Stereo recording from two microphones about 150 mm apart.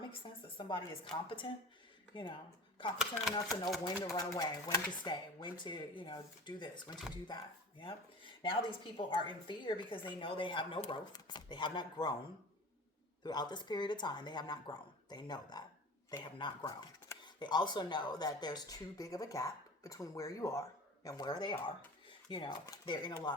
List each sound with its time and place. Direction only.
0.0 s speech: 35° left (ahead or behind)
3.0 s speech: centre (ahead or behind)
3.8 s speech: 25° left (ahead or behind)
13.2 s speech: 30° left (ahead or behind)